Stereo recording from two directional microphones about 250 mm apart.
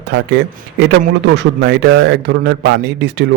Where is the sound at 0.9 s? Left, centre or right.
Right.